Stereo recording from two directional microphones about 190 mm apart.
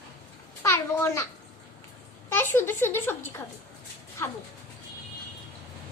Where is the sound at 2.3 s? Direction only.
10° left (ahead or behind).